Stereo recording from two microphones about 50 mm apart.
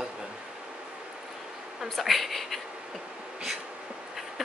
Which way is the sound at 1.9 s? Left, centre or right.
Centre.